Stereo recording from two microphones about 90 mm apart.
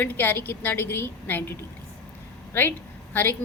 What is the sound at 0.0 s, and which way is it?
A woman's voice, 20° left (ahead or behind).